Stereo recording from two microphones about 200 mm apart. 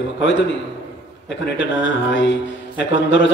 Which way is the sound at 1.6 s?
70° left (ahead or behind).